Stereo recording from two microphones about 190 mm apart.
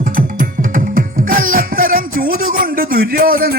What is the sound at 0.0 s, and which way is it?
Music, 45° right (ahead or behind).